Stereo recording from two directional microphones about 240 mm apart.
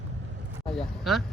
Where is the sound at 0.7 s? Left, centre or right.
Centre.